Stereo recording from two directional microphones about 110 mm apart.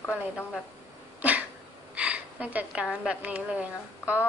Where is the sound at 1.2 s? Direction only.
15° right (ahead or behind).